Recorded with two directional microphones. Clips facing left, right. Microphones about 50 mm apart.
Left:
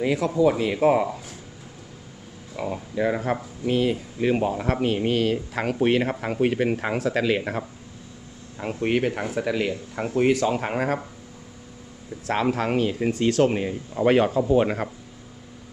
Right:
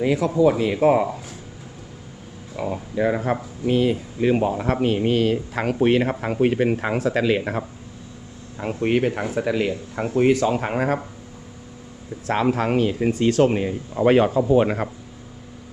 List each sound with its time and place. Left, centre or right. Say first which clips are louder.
0.0 s speech: right 2 dB; centre
1.0 s speech: right 2 dB; centre
2.6 s speech: right 2 dB; centre
8.8 s speech: right 3 dB; centre
12.2 s speech: right 3 dB; centre